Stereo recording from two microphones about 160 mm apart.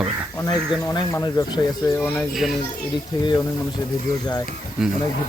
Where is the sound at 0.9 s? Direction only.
25° left (ahead or behind).